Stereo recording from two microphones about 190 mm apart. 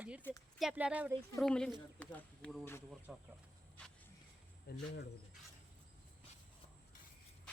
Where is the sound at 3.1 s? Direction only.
5° right (ahead or behind).